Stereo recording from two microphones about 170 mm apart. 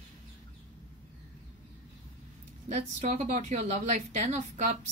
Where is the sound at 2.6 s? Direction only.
40° right (ahead or behind).